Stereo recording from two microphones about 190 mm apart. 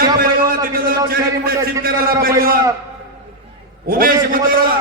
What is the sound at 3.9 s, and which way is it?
Speech, 50° right (ahead or behind).